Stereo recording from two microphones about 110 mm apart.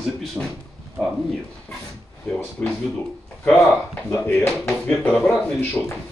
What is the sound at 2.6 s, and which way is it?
Speech, 15° left (ahead or behind).